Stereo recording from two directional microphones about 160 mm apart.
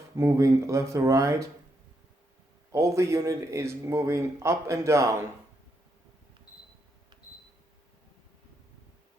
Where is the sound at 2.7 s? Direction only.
20° right (ahead or behind).